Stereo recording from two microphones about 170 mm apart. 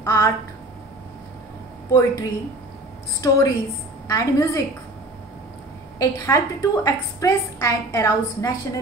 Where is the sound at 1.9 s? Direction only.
20° left (ahead or behind).